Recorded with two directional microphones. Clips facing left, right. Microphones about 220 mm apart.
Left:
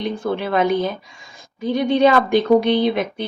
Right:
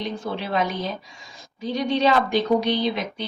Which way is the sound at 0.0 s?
55° left (ahead or behind).